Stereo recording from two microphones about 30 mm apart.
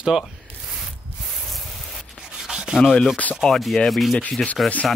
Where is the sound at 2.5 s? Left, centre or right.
Right.